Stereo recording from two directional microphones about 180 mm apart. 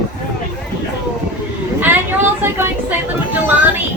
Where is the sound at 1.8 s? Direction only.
10° right (ahead or behind).